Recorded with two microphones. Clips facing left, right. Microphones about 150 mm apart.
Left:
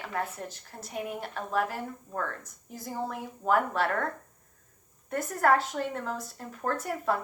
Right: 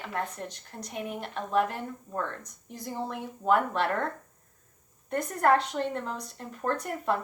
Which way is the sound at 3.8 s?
25° right (ahead or behind).